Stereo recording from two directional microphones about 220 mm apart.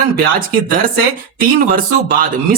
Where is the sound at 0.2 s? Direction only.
40° right (ahead or behind).